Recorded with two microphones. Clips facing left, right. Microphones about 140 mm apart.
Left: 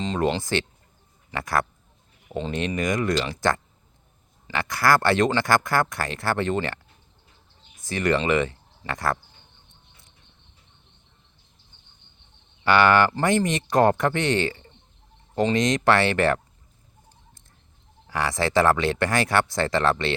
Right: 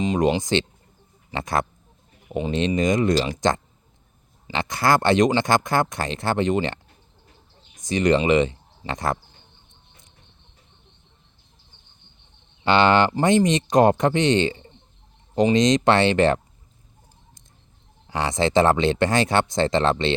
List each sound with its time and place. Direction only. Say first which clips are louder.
0.0 s speech: right 4 dB; 15° right (ahead or behind)
7.8 s speech: right 4 dB; 20° right (ahead or behind)
12.6 s speech: right 1 dB; 25° right (ahead or behind)
18.1 s speech: right 3 dB; 20° right (ahead or behind)